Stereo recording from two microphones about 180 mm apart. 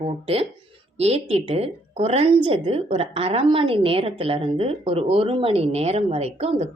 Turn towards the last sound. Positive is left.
turn(degrees=-35)  # may be behind; listen again after turning